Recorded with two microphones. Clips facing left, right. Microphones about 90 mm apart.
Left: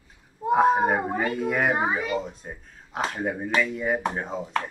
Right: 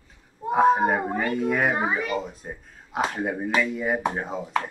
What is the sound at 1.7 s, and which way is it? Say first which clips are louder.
Speech: even; 20° left (ahead or behind).